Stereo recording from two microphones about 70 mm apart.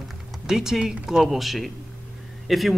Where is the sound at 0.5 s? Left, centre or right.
Centre.